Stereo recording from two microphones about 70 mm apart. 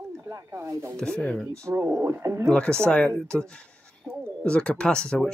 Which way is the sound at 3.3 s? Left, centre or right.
Centre.